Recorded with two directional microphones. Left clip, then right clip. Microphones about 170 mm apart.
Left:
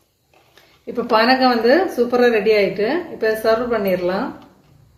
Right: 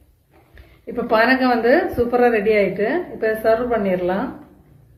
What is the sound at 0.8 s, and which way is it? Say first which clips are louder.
Speech: left 1 dB; 55° left (ahead or behind).